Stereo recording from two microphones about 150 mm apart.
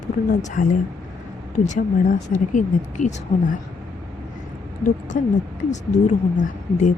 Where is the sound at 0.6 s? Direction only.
65° left (ahead or behind).